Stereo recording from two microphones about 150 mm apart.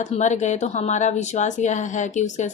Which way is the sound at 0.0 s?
50° left (ahead or behind).